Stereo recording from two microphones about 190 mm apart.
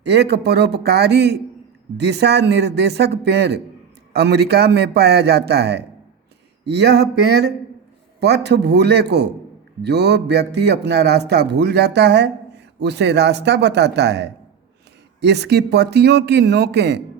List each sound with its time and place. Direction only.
0.0 s a man's voice: 60° right (ahead or behind)